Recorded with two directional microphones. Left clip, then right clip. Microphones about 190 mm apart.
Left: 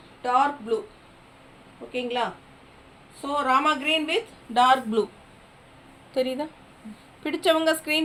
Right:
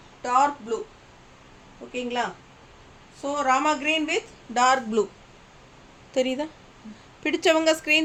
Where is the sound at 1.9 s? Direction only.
10° right (ahead or behind).